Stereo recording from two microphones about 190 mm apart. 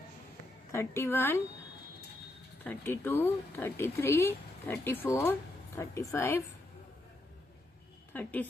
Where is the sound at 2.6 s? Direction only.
10° left (ahead or behind).